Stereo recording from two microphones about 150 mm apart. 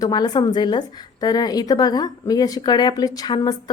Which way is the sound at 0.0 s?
25° left (ahead or behind).